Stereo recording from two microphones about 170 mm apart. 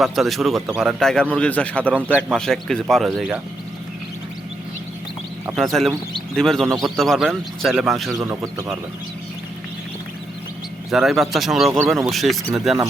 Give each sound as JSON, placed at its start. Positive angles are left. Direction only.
{"t": 0.0, "sound": "speech", "side_deg": 0}
{"t": 5.5, "sound": "speech", "side_deg": 0}
{"t": 8.1, "sound": "speech", "side_deg": -15}
{"t": 10.9, "sound": "speech", "side_deg": 0}